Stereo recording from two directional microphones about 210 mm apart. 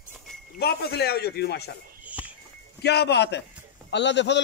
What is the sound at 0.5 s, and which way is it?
Speech, 50° left (ahead or behind).